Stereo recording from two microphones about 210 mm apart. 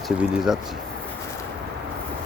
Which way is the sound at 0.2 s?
5° right (ahead or behind).